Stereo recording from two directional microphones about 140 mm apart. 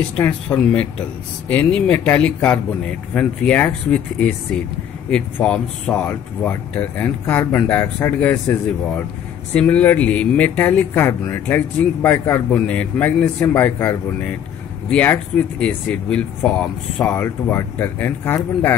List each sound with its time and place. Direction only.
0.2 s speech: 10° left (ahead or behind)
9.5 s speech: 10° left (ahead or behind)